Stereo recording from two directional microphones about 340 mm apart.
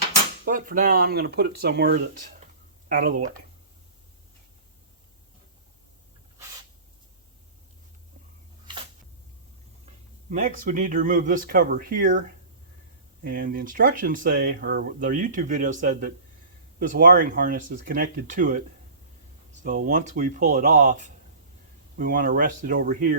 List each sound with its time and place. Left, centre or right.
0.4 s speech: right
10.2 s speech: right
13.2 s speech: right
19.6 s speech: right